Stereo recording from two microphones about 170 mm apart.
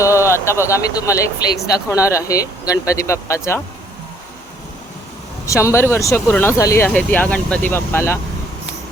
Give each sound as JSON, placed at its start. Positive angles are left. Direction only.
{"t": 0.0, "sound": "speech", "side_deg": 15}
{"t": 5.5, "sound": "speech", "side_deg": 15}